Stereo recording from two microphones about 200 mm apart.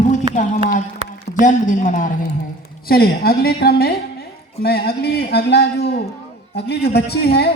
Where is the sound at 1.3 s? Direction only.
40° left (ahead or behind).